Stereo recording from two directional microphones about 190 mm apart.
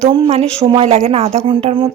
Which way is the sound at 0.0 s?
25° right (ahead or behind).